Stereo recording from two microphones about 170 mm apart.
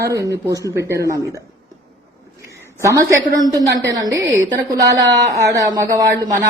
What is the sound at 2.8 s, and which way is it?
A woman's voice, 20° right (ahead or behind).